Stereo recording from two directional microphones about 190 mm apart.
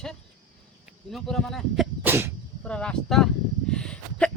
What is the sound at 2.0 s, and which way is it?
Sneeze, 10° right (ahead or behind).